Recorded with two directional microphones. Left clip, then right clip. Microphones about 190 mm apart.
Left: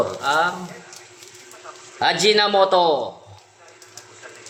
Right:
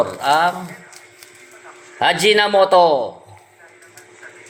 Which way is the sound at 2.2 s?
15° right (ahead or behind).